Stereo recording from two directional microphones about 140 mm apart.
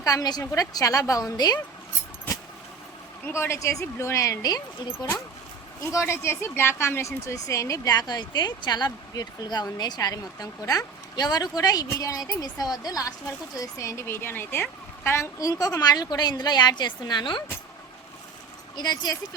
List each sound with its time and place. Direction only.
0.0 s speech: 25° left (ahead or behind)
3.2 s speech: 15° left (ahead or behind)
5.8 s speech: 20° left (ahead or behind)
18.8 s speech: 30° left (ahead or behind)